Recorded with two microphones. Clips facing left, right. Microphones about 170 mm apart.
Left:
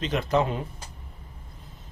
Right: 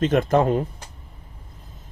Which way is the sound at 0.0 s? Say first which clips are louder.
Right 6 dB; 50° right (ahead or behind).